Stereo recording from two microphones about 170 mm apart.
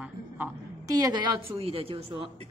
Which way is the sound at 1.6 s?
35° right (ahead or behind).